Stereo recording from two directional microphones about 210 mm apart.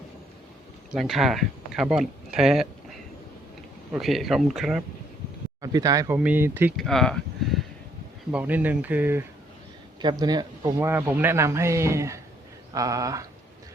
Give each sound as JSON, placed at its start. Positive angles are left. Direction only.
{"t": 0.9, "sound": "speech", "side_deg": 0}
{"t": 3.9, "sound": "speech", "side_deg": 0}
{"t": 5.6, "sound": "a man's voice", "side_deg": -15}
{"t": 6.7, "sound": "a man's voice", "side_deg": 0}
{"t": 10.0, "sound": "a man's voice", "side_deg": -20}